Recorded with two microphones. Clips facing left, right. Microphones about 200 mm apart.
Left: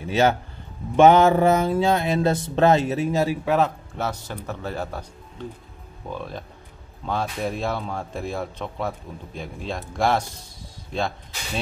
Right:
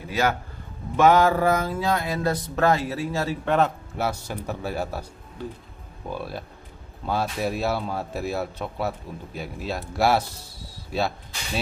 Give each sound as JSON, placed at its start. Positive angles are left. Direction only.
{"t": 0.0, "sound": "speech", "side_deg": 25}
{"t": 3.4, "sound": "speech", "side_deg": 0}
{"t": 6.0, "sound": "speech", "side_deg": -5}